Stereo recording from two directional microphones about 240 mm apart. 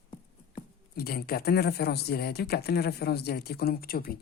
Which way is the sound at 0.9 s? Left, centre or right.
Left.